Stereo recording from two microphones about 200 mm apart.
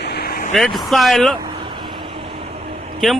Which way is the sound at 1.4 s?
25° right (ahead or behind).